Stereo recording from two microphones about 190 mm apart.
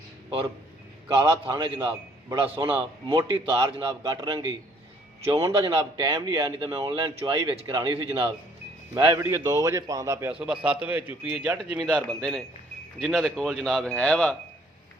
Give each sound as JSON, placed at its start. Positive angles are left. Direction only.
{"t": 1.1, "sound": "a man's voice", "side_deg": -15}
{"t": 3.8, "sound": "a man's voice", "side_deg": -15}